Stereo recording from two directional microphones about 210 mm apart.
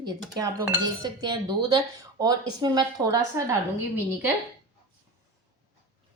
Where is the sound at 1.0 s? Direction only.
20° right (ahead or behind).